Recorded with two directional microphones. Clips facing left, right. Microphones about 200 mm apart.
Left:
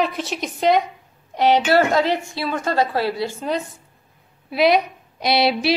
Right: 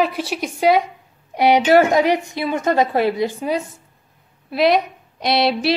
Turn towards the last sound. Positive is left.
turn(degrees=0)  # may be behind; listen again after turning